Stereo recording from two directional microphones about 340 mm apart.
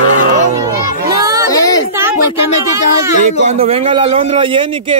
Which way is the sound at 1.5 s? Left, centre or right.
Centre.